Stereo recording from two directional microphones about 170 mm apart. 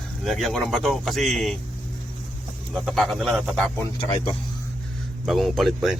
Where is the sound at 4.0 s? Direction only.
25° left (ahead or behind).